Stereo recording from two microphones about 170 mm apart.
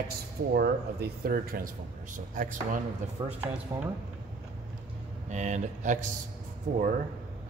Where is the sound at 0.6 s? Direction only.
70° right (ahead or behind); by 2.8 s 50° right (ahead or behind).